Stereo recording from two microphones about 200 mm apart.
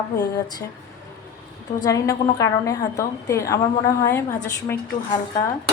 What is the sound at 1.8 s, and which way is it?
A woman's voice, 15° left (ahead or behind).